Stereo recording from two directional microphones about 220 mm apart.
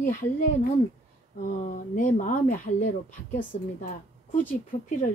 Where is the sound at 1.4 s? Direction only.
35° left (ahead or behind).